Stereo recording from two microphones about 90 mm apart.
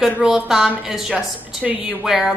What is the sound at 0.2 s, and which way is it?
A woman's voice, 5° right (ahead or behind).